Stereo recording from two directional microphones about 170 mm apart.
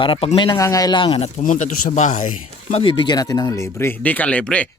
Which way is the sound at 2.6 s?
35° left (ahead or behind).